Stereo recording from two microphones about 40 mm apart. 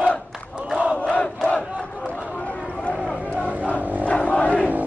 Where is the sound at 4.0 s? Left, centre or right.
Left.